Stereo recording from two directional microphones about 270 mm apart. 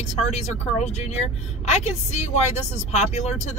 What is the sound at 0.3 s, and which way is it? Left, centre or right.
Speech, left.